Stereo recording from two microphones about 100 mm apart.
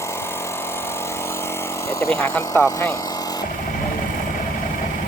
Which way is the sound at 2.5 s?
35° left (ahead or behind).